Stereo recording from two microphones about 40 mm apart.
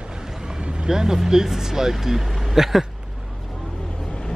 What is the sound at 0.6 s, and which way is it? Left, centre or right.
Vehicle, right.